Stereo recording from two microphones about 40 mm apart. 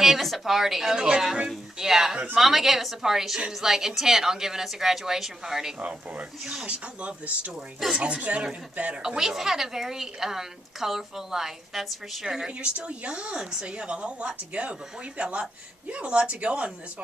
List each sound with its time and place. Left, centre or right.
0.0 s a woman's voice: centre
5.8 s speech: right
7.8 s a woman's voice: centre
8.2 s speech: right
9.0 s a woman's voice: centre
12.3 s a woman's voice: centre